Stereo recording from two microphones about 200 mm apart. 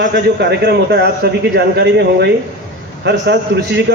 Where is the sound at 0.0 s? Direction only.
55° right (ahead or behind).